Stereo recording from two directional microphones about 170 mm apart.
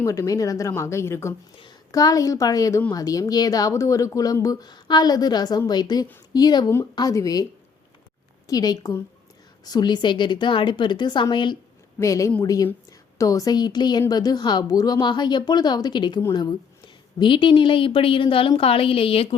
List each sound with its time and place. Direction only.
0.0 s a woman's voice: 20° left (ahead or behind)
8.4 s a woman's voice: 20° left (ahead or behind)